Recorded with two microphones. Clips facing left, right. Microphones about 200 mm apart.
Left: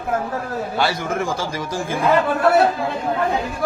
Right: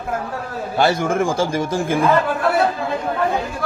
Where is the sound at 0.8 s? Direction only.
50° right (ahead or behind).